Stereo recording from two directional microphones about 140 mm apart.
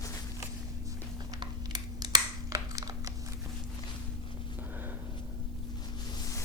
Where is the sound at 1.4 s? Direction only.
30° right (ahead or behind).